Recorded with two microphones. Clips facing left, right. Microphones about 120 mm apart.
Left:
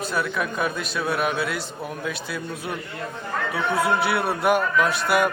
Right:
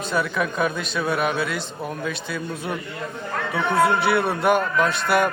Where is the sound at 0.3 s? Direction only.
5° left (ahead or behind).